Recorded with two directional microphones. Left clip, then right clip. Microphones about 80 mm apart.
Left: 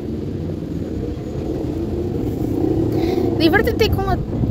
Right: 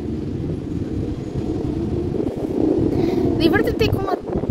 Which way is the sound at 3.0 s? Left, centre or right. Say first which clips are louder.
Left 3 dB; right.